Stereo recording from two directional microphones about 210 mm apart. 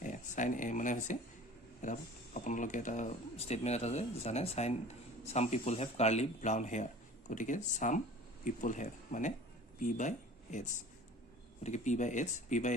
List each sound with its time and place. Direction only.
0.0 s speech: 35° left (ahead or behind)
11.6 s speech: 35° left (ahead or behind)